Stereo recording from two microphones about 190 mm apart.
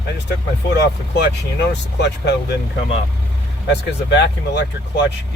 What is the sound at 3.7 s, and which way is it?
Speech, 65° left (ahead or behind).